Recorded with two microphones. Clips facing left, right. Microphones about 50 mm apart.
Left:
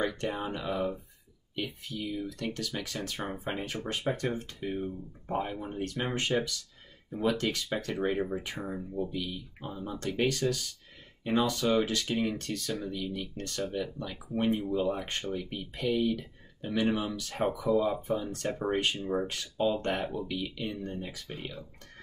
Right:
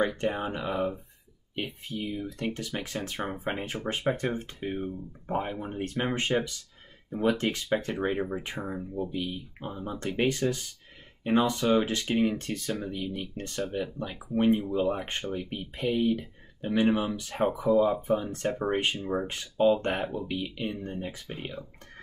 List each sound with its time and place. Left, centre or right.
0.0 s speech: right
18.5 s speech: centre
19.2 s speech: right